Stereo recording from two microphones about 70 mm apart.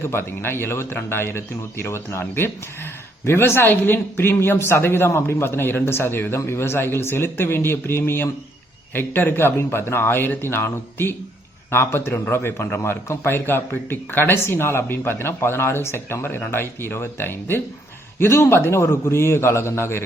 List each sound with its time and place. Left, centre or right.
0.0 s a man's voice: left